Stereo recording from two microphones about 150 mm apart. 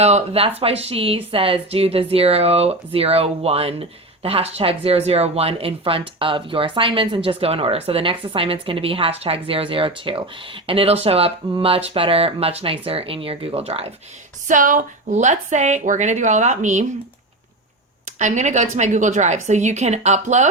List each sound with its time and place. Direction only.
0.0 s speech: 40° right (ahead or behind)
14.4 s a woman's voice: 60° right (ahead or behind)
18.2 s a woman's voice: 55° right (ahead or behind)